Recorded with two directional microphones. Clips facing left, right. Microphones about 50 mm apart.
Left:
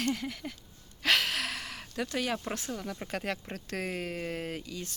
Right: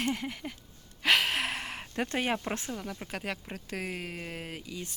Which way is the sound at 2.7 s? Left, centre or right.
Centre.